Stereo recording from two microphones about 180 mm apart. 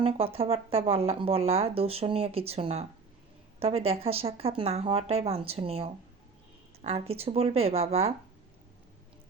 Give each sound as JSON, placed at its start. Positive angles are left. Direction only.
{"t": 0.0, "sound": "speech", "side_deg": -30}